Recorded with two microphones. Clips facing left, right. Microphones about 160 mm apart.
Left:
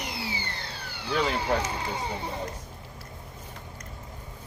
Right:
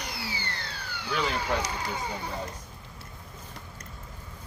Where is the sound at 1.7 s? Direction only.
25° left (ahead or behind).